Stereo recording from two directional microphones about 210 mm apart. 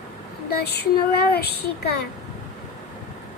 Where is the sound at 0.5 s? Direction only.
50° left (ahead or behind).